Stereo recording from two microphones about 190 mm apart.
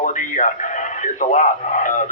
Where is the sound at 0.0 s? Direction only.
40° left (ahead or behind).